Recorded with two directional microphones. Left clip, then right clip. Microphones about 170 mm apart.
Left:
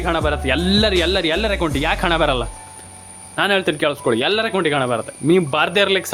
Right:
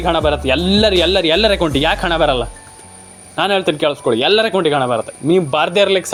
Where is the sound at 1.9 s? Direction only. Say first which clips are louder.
Right 3 dB; 5° right (ahead or behind).